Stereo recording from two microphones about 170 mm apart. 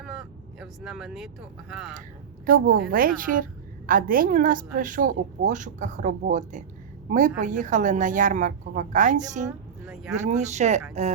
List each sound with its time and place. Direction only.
0.0 s vehicle: 5° right (ahead or behind)
2.5 s a woman's voice: 60° right (ahead or behind)
9.8 s speech: 5° right (ahead or behind)
10.2 s a woman's voice: 40° right (ahead or behind)